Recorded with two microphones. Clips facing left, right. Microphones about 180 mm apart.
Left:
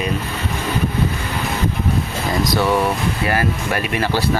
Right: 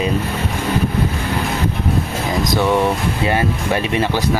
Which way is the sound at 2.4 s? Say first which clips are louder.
Right 2 dB; 20° right (ahead or behind).